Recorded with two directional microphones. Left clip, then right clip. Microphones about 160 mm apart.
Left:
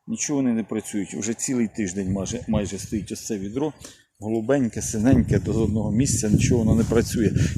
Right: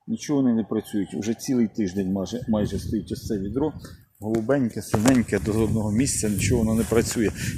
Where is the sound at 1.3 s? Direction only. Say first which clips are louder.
Right 1 dB; 35° left (ahead or behind).